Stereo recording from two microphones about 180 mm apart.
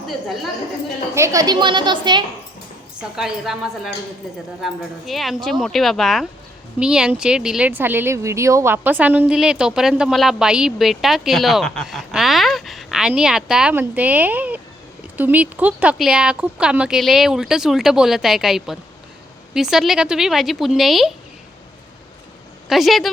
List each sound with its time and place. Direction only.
1.1 s a woman's voice: 15° right (ahead or behind)
3.0 s speech: centre (ahead or behind)
22.7 s speech: centre (ahead or behind)